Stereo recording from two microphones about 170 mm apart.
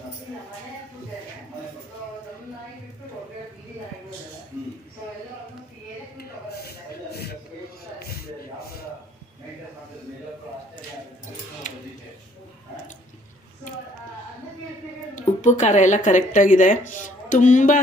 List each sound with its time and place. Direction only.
15.1 s a woman's voice: 45° left (ahead or behind)